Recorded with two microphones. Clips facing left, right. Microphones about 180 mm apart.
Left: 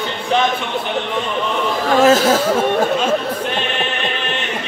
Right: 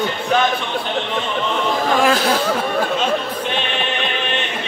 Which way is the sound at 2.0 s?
40° left (ahead or behind).